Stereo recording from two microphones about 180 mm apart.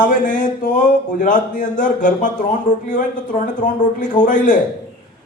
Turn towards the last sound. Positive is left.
turn(degrees=45)  # may be behind; listen again after turning